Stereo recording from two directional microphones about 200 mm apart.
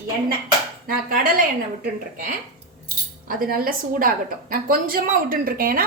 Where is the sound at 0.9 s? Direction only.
45° right (ahead or behind).